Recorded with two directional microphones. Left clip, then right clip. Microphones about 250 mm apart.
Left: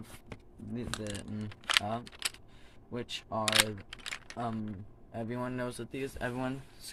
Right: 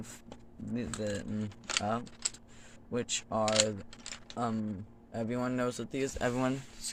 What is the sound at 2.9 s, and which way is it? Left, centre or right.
Speech, right.